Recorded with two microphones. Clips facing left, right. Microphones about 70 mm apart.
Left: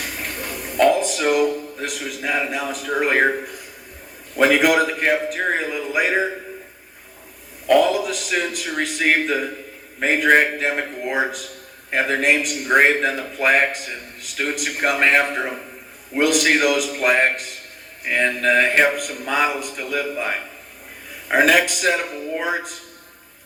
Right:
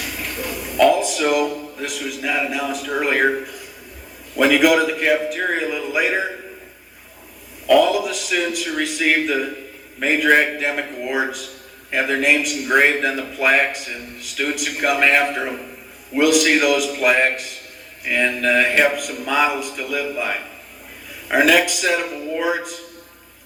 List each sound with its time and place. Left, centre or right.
0.0 s a sound: left
4.4 s a man's voice: left
7.7 s a man's voice: left